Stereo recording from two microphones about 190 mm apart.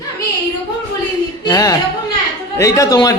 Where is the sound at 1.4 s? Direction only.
20° left (ahead or behind).